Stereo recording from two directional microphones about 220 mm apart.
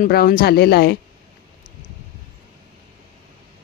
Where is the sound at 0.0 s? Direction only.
40° left (ahead or behind).